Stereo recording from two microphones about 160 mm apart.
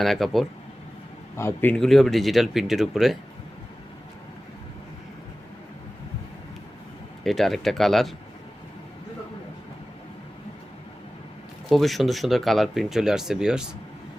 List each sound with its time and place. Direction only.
0.0 s speech: centre (ahead or behind)
1.4 s a man's voice: 15° left (ahead or behind)
1.7 s speech: centre (ahead or behind)
7.3 s speech: centre (ahead or behind)
11.7 s speech: centre (ahead or behind)